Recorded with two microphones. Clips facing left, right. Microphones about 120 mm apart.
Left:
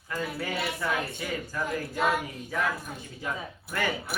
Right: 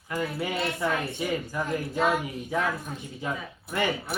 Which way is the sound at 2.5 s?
25° right (ahead or behind).